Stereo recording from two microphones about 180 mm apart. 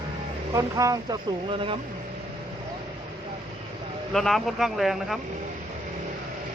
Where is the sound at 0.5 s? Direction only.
20° right (ahead or behind).